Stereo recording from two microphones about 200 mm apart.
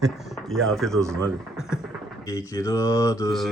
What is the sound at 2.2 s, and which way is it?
Speech, 15° left (ahead or behind).